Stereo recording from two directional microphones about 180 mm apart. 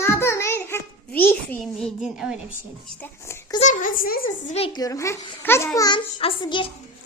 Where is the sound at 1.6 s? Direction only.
Centre (ahead or behind).